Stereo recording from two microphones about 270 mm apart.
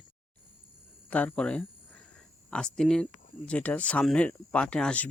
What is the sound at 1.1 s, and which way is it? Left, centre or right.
Speech, centre.